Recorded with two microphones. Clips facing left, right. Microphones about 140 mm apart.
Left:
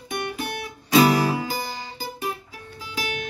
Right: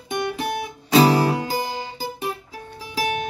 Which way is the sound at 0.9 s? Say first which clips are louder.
Right 2 dB; 30° right (ahead or behind).